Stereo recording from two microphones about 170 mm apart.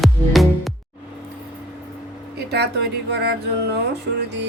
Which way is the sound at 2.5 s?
75° right (ahead or behind).